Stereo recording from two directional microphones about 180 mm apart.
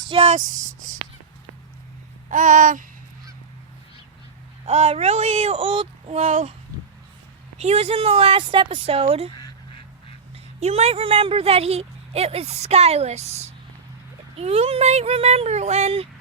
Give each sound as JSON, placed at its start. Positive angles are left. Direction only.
{"t": 0.1, "sound": "a sound", "side_deg": -35}
{"t": 2.3, "sound": "babbling", "side_deg": -45}
{"t": 4.6, "sound": "speech", "side_deg": -35}
{"t": 6.1, "sound": "speech", "side_deg": -40}
{"t": 7.6, "sound": "speech", "side_deg": -35}
{"t": 10.3, "sound": "speech", "side_deg": -35}